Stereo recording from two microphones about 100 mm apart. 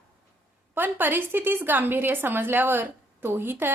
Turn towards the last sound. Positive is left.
turn(degrees=-20)  # may be behind; listen again after turning